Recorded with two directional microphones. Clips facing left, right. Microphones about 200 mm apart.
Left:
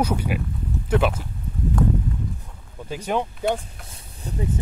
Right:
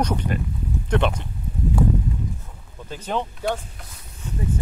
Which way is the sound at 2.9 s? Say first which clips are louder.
Left 2 dB; 10° left (ahead or behind).